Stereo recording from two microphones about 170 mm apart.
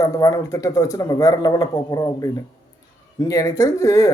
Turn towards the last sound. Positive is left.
turn(degrees=20)  # may be behind; listen again after turning